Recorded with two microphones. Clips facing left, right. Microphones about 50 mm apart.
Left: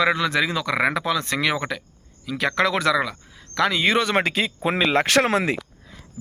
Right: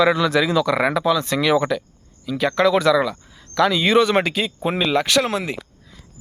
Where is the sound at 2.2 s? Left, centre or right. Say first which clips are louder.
Right 4 dB; left.